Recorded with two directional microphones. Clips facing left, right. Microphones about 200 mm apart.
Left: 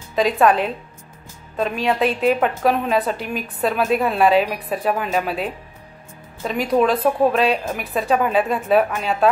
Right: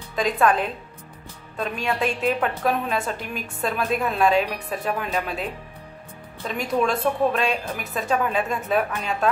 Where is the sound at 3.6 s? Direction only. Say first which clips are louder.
Left 5 dB; 5° left (ahead or behind).